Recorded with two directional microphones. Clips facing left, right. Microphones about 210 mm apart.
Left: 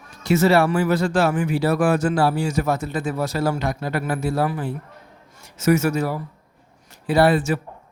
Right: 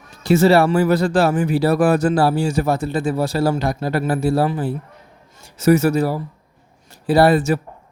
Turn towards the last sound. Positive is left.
turn(degrees=-40)  # may be behind; listen again after turning